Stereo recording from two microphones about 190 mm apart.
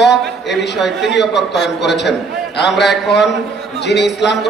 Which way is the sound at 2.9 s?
60° left (ahead or behind).